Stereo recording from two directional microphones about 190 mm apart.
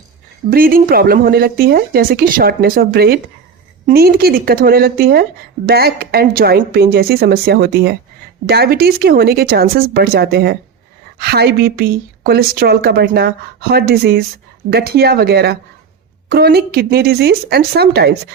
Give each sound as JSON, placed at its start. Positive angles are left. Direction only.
{"t": 0.5, "sound": "a woman's voice", "side_deg": -50}